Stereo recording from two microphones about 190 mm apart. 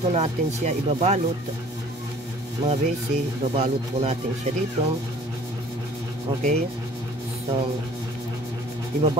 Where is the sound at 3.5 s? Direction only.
35° right (ahead or behind).